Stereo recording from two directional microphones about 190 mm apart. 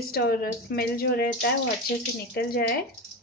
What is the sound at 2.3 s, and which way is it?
Speech, 55° left (ahead or behind).